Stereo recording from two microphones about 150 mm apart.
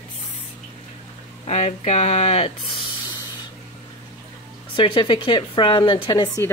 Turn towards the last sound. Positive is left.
turn(degrees=30)  # may be behind; listen again after turning